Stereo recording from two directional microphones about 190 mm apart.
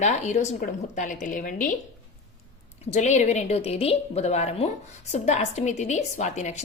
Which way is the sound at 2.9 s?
35° left (ahead or behind).